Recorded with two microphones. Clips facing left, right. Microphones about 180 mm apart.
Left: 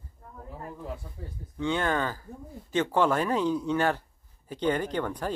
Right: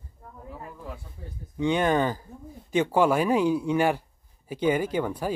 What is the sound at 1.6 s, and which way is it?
Speech, 15° right (ahead or behind).